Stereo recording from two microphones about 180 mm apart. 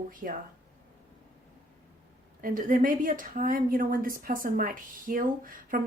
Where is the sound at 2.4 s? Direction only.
50° right (ahead or behind).